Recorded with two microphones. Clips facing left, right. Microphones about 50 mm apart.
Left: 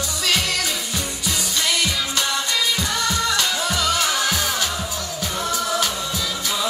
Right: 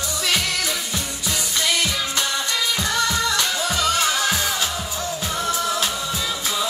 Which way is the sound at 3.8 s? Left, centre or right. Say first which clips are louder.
Right 2 dB; right.